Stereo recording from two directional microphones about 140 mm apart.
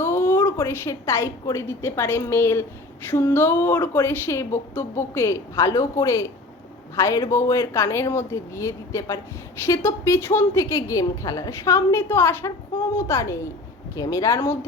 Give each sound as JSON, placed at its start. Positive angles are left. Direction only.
{"t": 0.0, "sound": "a woman's voice", "side_deg": 20}